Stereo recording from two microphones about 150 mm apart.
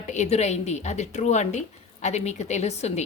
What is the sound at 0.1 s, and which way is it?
A woman's voice, 50° left (ahead or behind).